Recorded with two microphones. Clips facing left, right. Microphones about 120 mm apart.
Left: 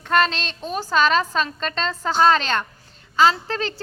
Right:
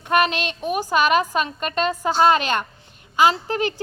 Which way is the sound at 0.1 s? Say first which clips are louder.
Right 1 dB; 15° right (ahead or behind).